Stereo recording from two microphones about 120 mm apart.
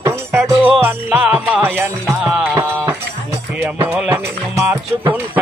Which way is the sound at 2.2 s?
5° right (ahead or behind).